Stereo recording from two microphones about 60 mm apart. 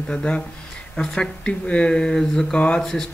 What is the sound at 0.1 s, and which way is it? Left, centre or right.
Speech, centre.